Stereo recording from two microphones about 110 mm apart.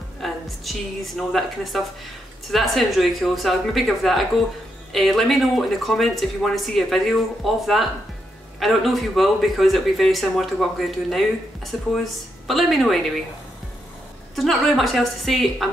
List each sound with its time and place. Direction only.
0.2 s speech: centre (ahead or behind)
14.3 s speech: centre (ahead or behind)